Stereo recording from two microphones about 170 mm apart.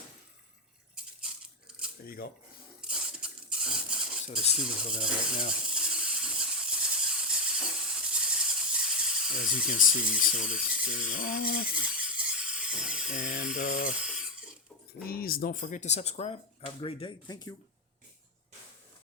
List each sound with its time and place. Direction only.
0.9 s a sound: 5° right (ahead or behind)
2.0 s speech: 60° left (ahead or behind)
2.8 s rub: 5° right (ahead or behind)
4.6 s coin: 5° right (ahead or behind)
5.5 s a sound: 5° right (ahead or behind)
9.6 s speech: 50° left (ahead or behind)
10.0 s coin: 5° right (ahead or behind)
10.3 s speech: 50° left (ahead or behind)
11.7 s a sound: 5° right (ahead or behind)
13.1 s speech: 50° left (ahead or behind)
13.9 s a sound: 5° right (ahead or behind)
15.0 s speech: 60° left (ahead or behind); by 17.5 s 25° left (ahead or behind)